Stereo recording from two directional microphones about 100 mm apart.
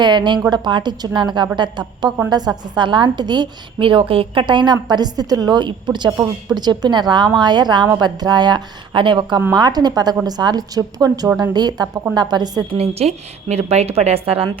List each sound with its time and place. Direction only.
0.0 s a woman's voice: 50° right (ahead or behind)
12.7 s a woman's voice: 85° right; by 14.6 s 70° right (ahead or behind)